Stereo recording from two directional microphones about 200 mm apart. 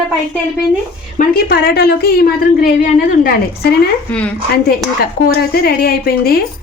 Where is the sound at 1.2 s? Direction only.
45° left (ahead or behind).